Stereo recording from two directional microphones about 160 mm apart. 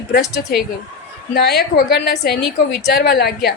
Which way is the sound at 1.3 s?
85° left.